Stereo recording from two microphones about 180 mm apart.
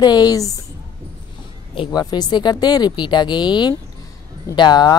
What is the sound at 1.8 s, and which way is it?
Speech, 20° left (ahead or behind).